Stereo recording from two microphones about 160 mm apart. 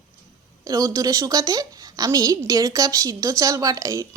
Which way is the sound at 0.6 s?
20° right (ahead or behind).